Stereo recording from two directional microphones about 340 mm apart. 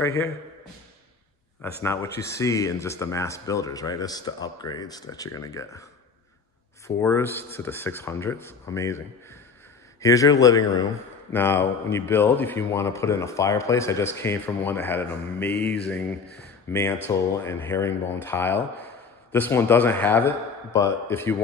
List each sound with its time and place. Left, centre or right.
1.6 s speech: centre
7.0 s speech: centre
15.6 s mantra: centre
16.7 s speech: centre